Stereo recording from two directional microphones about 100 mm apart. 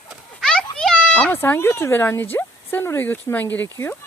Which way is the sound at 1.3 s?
20° left (ahead or behind).